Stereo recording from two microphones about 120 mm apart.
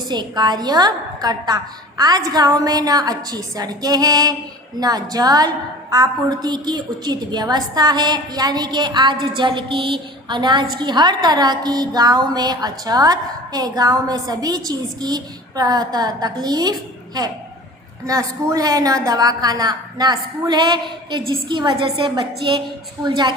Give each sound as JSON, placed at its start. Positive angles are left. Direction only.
{"t": 0.1, "sound": "a woman's voice", "side_deg": -35}
{"t": 18.0, "sound": "a woman's voice", "side_deg": -25}